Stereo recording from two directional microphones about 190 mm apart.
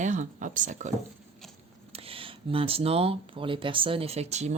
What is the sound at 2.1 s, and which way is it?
Speech, 30° right (ahead or behind).